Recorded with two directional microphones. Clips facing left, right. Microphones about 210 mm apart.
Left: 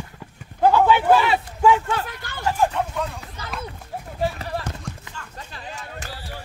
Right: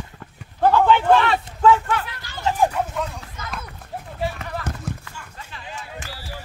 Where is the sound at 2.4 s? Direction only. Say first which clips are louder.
Right 1 dB; 15° right (ahead or behind).